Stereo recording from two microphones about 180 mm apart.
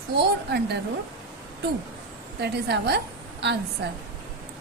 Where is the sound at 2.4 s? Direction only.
65° right (ahead or behind).